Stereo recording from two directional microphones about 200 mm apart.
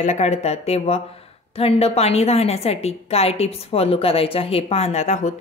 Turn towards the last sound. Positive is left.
turn(degrees=35)  # may be behind; listen again after turning